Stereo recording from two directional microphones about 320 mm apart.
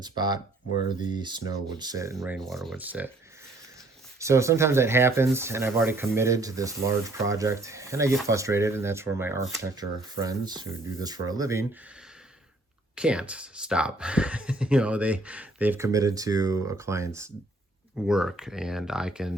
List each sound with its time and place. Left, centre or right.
0.9 s speech: centre
4.2 s speech: centre
13.0 s speech: centre